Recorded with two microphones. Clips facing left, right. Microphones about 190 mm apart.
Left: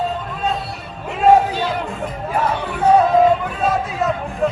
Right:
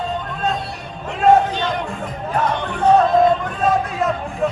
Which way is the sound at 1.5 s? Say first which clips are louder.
Left 1 dB; 5° left (ahead or behind).